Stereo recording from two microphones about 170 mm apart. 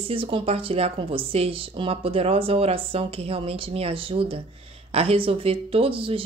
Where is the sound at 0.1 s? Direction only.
30° right (ahead or behind).